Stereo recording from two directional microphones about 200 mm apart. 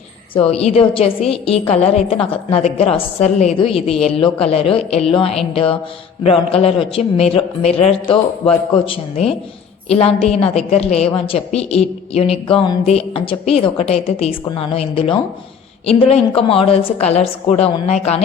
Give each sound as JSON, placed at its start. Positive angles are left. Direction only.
{"t": 0.3, "sound": "a man's voice", "side_deg": 30}